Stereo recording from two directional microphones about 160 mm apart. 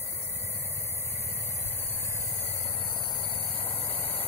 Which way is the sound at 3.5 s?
35° left (ahead or behind).